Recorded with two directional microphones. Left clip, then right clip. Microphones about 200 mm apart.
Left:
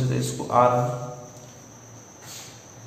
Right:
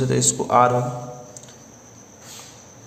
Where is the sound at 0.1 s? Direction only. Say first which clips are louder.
Right 4 dB; 45° right (ahead or behind).